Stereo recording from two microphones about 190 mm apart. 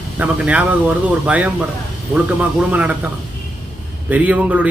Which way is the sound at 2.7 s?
10° right (ahead or behind).